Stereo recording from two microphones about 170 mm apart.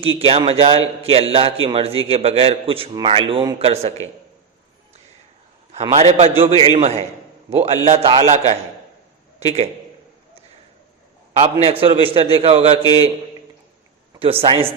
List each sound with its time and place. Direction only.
0.0 s a man's voice: 35° right (ahead or behind)
5.9 s a man's voice: 40° right (ahead or behind)
11.6 s a man's voice: 35° right (ahead or behind)
12.8 s a man's voice: 25° left (ahead or behind)
14.4 s a man's voice: 35° right (ahead or behind)